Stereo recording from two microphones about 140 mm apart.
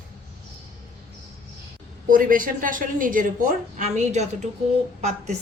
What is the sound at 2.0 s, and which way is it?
A woman's voice, 75° right (ahead or behind).